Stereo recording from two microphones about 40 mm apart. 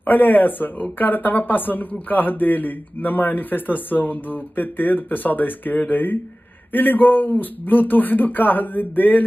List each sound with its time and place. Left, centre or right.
0.0 s a man's voice: left